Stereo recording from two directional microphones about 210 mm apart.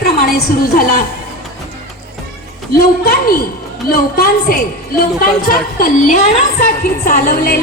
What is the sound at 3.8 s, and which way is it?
A woman's voice, 45° left (ahead or behind).